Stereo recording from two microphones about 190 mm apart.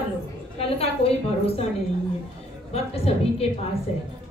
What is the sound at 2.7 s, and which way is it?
Speech, 30° left (ahead or behind).